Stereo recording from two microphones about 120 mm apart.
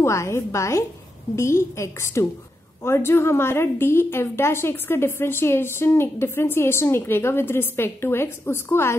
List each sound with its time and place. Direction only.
0.0 s a woman's voice: 25° left (ahead or behind)